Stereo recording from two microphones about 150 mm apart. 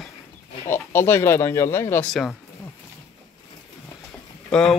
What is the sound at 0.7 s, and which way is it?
Speech, 15° left (ahead or behind).